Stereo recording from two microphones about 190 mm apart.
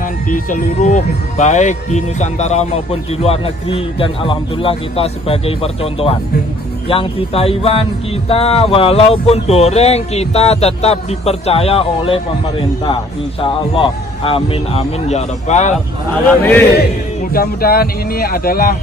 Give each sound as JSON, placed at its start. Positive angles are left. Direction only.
{"t": 0.3, "sound": "speech", "side_deg": 45}
{"t": 16.3, "sound": "a man's voice", "side_deg": 10}
{"t": 16.7, "sound": "speech", "side_deg": 55}